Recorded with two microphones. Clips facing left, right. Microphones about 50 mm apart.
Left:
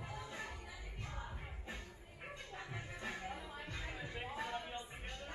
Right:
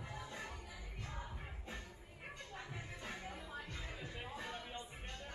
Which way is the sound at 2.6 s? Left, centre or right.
Centre.